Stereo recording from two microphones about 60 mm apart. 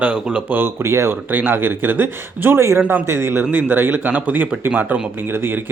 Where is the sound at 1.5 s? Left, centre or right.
Right.